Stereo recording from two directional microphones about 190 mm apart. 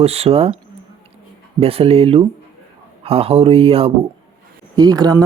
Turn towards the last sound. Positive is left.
turn(degrees=-20)  # may be behind; listen again after turning